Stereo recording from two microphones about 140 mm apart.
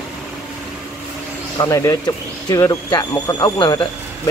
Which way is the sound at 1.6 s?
25° left (ahead or behind).